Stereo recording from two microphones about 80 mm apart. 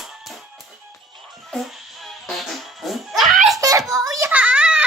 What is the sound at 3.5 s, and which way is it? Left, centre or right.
Hands, right.